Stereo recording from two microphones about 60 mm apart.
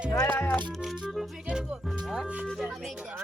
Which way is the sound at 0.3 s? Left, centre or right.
Left.